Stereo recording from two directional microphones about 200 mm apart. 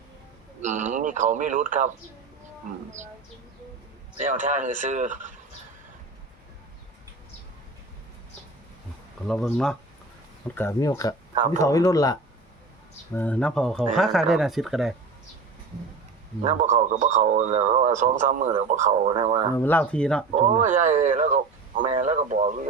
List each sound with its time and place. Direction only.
0.6 s a man's voice: 40° right (ahead or behind)
4.2 s speech: 40° right (ahead or behind)
9.2 s speech: 5° left (ahead or behind)
13.1 s speech: 5° left (ahead or behind)
16.4 s speech: 35° right (ahead or behind)
19.1 s speech: 25° right (ahead or behind)
19.5 s speech: 10° left (ahead or behind)
20.3 s speech: 40° right (ahead or behind)
21.8 s speech: 25° right (ahead or behind)
22.0 s speech: 35° right (ahead or behind)